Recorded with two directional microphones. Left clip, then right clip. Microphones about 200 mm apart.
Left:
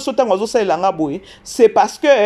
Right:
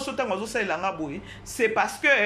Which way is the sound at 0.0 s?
35° left (ahead or behind).